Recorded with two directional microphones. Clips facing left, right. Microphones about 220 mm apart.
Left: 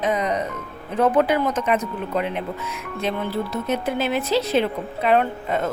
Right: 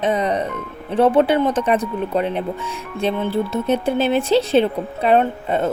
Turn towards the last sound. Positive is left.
turn(degrees=-30)  # may be behind; listen again after turning